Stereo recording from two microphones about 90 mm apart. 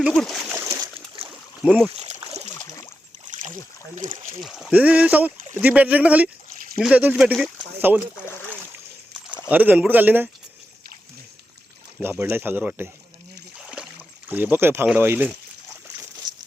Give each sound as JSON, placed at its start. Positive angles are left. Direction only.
{"t": 0.1, "sound": "speech", "side_deg": 5}
{"t": 1.6, "sound": "speech", "side_deg": -10}
{"t": 4.4, "sound": "speech", "side_deg": -5}
{"t": 4.7, "sound": "speech", "side_deg": -15}
{"t": 9.5, "sound": "speech", "side_deg": -20}
{"t": 12.0, "sound": "speech", "side_deg": -25}
{"t": 13.6, "sound": "rowboat", "side_deg": -10}
{"t": 14.3, "sound": "speech", "side_deg": -20}